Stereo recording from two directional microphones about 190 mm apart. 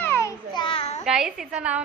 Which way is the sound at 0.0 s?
15° left (ahead or behind).